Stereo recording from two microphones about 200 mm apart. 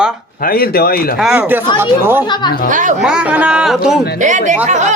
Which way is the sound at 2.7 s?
40° right (ahead or behind).